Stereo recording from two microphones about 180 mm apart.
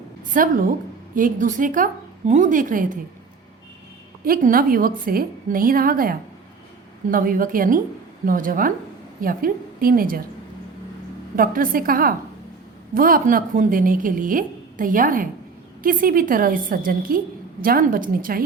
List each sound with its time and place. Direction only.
0.3 s a woman's voice: 50° right (ahead or behind)
4.2 s a woman's voice: 50° right (ahead or behind)
11.3 s a woman's voice: 50° right (ahead or behind)